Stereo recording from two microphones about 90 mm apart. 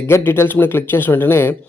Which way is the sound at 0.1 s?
30° left (ahead or behind).